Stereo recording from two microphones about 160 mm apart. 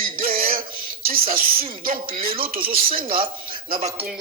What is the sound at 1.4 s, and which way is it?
Speech, 65° right (ahead or behind).